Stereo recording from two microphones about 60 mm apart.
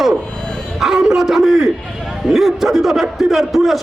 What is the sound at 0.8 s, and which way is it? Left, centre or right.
A man's voice, centre.